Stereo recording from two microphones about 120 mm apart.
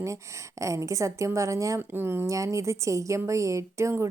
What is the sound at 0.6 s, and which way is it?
Speech, 25° right (ahead or behind).